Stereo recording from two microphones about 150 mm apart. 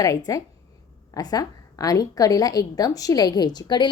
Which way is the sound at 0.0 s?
25° left (ahead or behind).